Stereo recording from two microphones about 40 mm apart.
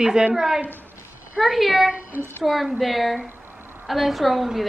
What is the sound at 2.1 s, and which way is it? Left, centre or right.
Speech, right.